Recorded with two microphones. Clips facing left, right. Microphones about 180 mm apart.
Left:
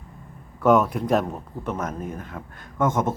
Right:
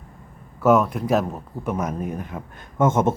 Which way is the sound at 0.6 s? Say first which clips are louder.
Right 1 dB; centre (ahead or behind).